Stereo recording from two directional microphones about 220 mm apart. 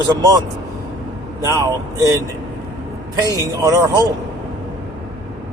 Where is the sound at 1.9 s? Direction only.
15° right (ahead or behind).